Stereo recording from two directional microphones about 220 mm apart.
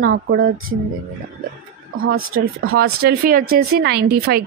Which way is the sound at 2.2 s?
75° right (ahead or behind).